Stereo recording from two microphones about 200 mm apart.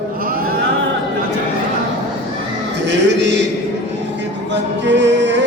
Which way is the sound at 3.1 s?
60° right (ahead or behind).